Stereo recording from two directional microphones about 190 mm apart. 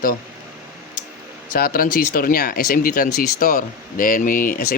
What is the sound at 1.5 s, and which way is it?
Speech, 50° left (ahead or behind).